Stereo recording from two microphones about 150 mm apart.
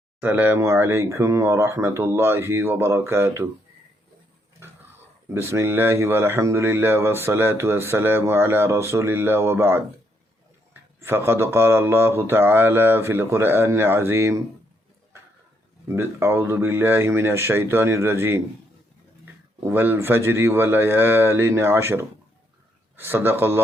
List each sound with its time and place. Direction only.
0.2 s speech: 10° right (ahead or behind)
4.6 s dog: 15° right (ahead or behind)
5.3 s speech: 15° right (ahead or behind)
11.0 s speech: 15° right (ahead or behind)
15.9 s speech: 15° right (ahead or behind)
19.6 s speech: 15° right (ahead or behind)